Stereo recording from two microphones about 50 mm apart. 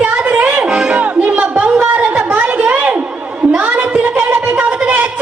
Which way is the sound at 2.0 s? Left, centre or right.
Right.